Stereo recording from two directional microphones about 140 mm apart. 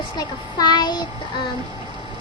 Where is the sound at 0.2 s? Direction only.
30° left (ahead or behind).